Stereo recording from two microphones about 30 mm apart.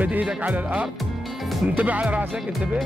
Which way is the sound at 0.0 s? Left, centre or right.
Right.